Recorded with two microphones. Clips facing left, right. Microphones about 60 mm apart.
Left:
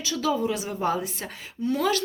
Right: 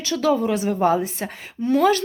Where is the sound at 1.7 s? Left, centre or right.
Right.